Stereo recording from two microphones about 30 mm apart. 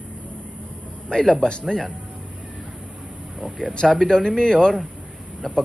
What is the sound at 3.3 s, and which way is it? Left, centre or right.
Speech, right.